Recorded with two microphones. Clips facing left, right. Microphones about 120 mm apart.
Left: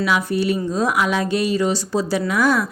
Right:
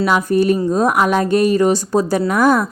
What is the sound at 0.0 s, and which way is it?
Speech, 45° right (ahead or behind).